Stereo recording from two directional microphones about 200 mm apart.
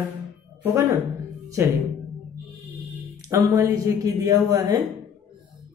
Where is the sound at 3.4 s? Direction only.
15° right (ahead or behind).